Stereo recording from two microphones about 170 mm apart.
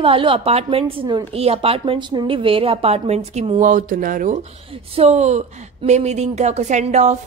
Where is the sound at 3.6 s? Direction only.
50° right (ahead or behind).